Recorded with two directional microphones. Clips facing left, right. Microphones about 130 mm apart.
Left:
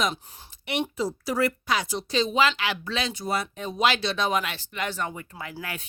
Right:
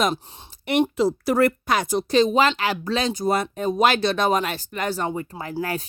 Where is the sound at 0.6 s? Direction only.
45° right (ahead or behind).